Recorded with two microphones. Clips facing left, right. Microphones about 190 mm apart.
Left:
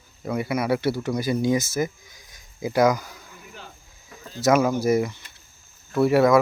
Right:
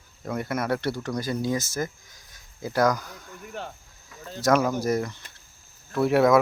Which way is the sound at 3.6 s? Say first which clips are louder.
Right 9 dB; 65° right (ahead or behind).